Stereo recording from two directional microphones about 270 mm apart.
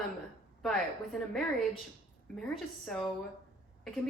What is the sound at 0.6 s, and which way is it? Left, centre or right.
Speech, centre.